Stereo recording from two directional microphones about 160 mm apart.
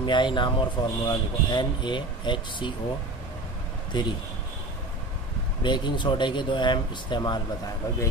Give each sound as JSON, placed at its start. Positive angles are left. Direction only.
{"t": 0.0, "sound": "speech", "side_deg": 30}
{"t": 5.6, "sound": "speech", "side_deg": 30}